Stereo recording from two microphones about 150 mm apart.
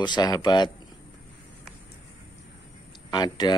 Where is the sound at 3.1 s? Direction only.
30° left (ahead or behind).